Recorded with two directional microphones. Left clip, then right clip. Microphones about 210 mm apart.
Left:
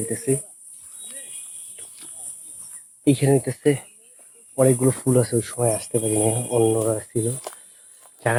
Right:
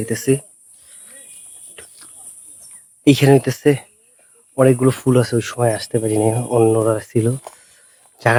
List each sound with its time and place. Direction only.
0.1 s speech: 40° right (ahead or behind)
3.1 s speech: 40° right (ahead or behind)
4.5 s speech: 40° right (ahead or behind)
8.2 s speech: 30° right (ahead or behind)